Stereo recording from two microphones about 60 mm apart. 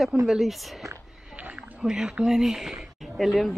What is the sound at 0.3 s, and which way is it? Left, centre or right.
Speech, centre.